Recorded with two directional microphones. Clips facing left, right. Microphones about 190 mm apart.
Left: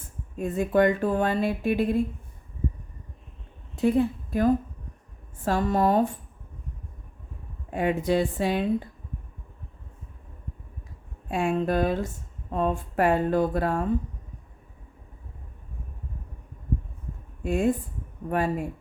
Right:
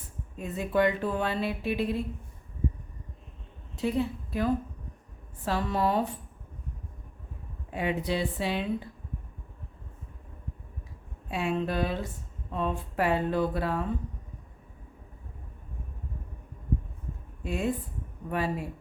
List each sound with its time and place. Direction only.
0.3 s speech: 45° left (ahead or behind)
3.8 s a woman's voice: 50° left (ahead or behind)
7.7 s speech: 50° left (ahead or behind)
11.3 s speech: 50° left (ahead or behind)
17.4 s speech: 50° left (ahead or behind)